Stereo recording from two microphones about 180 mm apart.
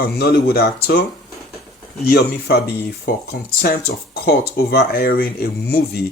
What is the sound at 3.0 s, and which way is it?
Speech, 55° left (ahead or behind).